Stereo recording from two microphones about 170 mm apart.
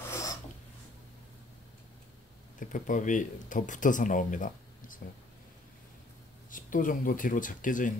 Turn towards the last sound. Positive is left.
turn(degrees=50)  # may be behind; listen again after turning